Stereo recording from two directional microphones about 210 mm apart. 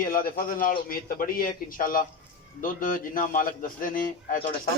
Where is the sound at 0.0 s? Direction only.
45° left (ahead or behind).